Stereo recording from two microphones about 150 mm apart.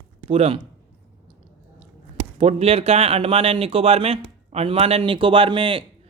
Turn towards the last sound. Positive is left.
turn(degrees=-35)  # may be behind; listen again after turning